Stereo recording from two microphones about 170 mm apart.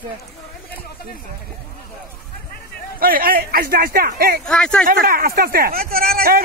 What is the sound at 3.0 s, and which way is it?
Speech, 60° right (ahead or behind).